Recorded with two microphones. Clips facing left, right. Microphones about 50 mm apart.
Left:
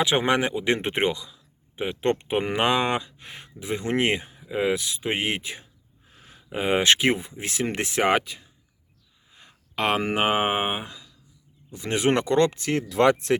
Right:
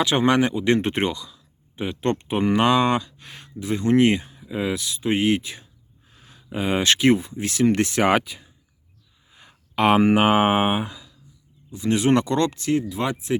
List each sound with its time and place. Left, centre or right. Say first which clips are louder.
0.0 s speech: right 3 dB; centre
11.7 s speech: right 3 dB; left
12.9 s speech: left 7 dB; left